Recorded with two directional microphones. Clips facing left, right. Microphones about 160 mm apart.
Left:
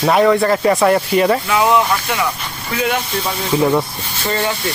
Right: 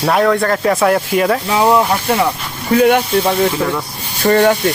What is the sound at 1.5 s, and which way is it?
Speech, 35° right (ahead or behind).